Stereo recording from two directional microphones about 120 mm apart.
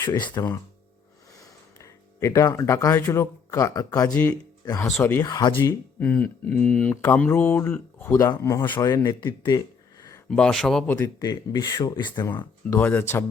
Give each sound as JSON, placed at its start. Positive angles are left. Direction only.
{"t": 0.0, "sound": "speech", "side_deg": 35}
{"t": 1.4, "sound": "music", "side_deg": 25}
{"t": 2.7, "sound": "speech", "side_deg": 25}
{"t": 4.9, "sound": "speech", "side_deg": 15}
{"t": 5.2, "sound": "speech", "side_deg": 35}
{"t": 6.0, "sound": "speech", "side_deg": 10}
{"t": 7.7, "sound": "speech", "side_deg": 25}
{"t": 10.2, "sound": "speech", "side_deg": 5}
{"t": 10.9, "sound": "speech", "side_deg": 30}
{"t": 12.7, "sound": "speech", "side_deg": 15}